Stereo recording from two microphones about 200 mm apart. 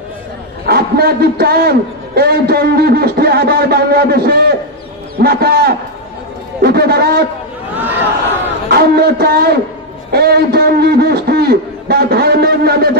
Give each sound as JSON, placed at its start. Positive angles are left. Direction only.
{"t": 0.7, "sound": "a man's voice", "side_deg": -50}
{"t": 8.6, "sound": "a man's voice", "side_deg": -50}